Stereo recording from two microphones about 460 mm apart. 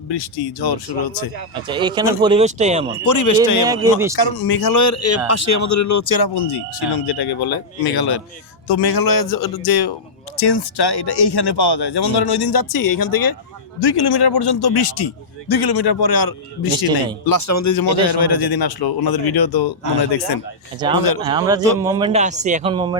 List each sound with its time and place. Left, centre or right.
0.1 s speech: left
1.6 s a man's voice: centre
3.0 s speech: left
3.7 s a man's voice: centre
4.2 s speech: left
20.8 s a man's voice: centre